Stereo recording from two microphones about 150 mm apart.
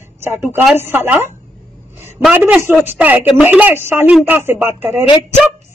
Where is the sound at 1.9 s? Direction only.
15° right (ahead or behind).